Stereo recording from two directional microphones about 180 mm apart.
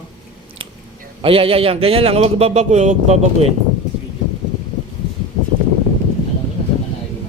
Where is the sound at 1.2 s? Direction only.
30° right (ahead or behind).